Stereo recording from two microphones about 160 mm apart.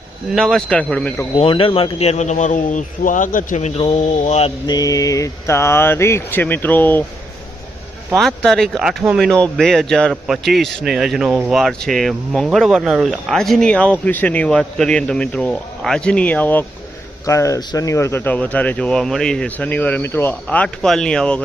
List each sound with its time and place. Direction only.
0.3 s speech: centre (ahead or behind)
1.4 s a man's voice: 35° left (ahead or behind)
4.6 s speech: 25° left (ahead or behind)
8.1 s speech: 5° left (ahead or behind)